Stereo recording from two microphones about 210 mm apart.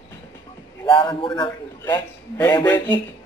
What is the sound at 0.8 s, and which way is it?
A man's voice, 20° left (ahead or behind).